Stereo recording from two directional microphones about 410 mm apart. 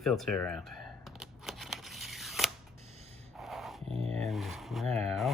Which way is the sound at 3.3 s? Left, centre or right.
Centre.